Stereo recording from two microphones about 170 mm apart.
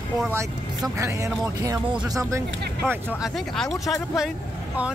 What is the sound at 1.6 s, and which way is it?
Speech, 20° right (ahead or behind).